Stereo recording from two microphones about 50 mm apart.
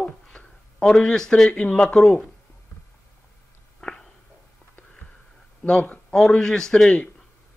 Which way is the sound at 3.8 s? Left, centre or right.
Centre.